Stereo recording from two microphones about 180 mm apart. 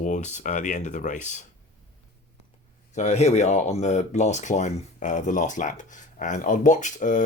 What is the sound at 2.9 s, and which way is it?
Speech, 40° left (ahead or behind).